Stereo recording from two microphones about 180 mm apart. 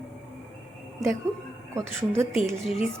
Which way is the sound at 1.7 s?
15° right (ahead or behind).